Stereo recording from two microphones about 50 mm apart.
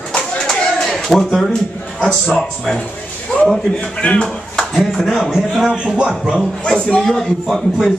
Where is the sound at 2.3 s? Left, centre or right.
Centre.